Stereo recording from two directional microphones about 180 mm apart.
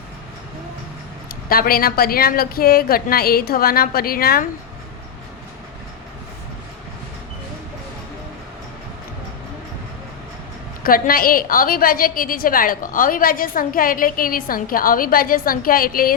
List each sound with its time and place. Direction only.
1.3 s a woman's voice: 55° left (ahead or behind)
10.8 s a woman's voice: 55° left (ahead or behind)